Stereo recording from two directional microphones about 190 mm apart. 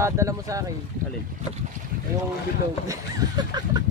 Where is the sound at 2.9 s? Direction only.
20° right (ahead or behind).